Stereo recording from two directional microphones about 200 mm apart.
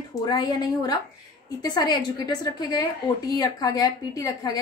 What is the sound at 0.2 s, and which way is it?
A woman's voice, 20° left (ahead or behind).